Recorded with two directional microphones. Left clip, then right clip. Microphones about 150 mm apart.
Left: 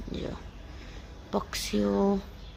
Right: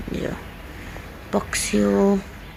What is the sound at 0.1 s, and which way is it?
Speech, centre (ahead or behind).